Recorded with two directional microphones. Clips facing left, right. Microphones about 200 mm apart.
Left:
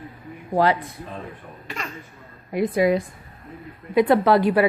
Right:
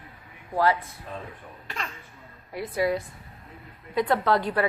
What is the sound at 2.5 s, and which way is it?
A woman's voice, 15° left (ahead or behind).